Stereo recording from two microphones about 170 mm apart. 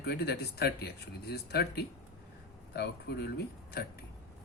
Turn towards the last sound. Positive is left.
turn(degrees=70)  # may be behind; listen again after turning